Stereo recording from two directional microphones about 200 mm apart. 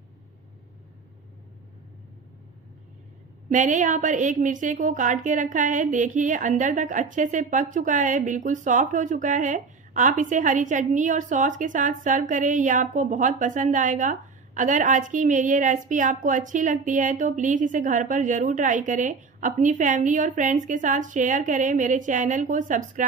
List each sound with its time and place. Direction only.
3.5 s a woman's voice: 40° right (ahead or behind)